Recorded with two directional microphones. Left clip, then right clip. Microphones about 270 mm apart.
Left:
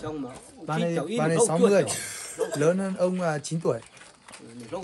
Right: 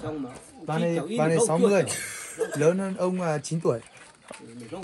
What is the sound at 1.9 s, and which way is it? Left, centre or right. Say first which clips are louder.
Speech: even; left.